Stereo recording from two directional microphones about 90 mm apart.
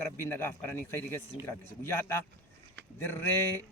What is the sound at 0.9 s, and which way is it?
Speech, 25° left (ahead or behind).